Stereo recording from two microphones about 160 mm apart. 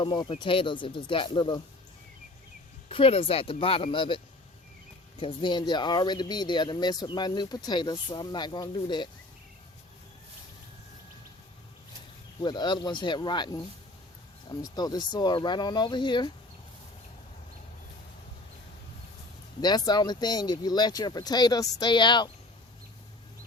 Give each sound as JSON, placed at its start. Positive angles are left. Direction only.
{"t": 0.0, "sound": "speech", "side_deg": 30}
{"t": 2.9, "sound": "speech", "side_deg": 35}
{"t": 5.2, "sound": "speech", "side_deg": 30}
{"t": 12.4, "sound": "speech", "side_deg": 25}
{"t": 14.6, "sound": "speech", "side_deg": 25}
{"t": 19.6, "sound": "speech", "side_deg": 25}